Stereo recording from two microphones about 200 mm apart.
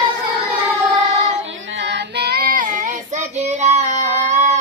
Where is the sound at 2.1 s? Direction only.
50° right (ahead or behind).